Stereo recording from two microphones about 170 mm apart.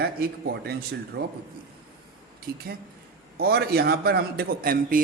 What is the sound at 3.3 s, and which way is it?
Speech, 65° right (ahead or behind).